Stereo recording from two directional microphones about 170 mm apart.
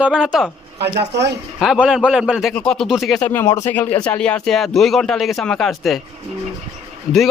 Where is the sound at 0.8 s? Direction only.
80° right.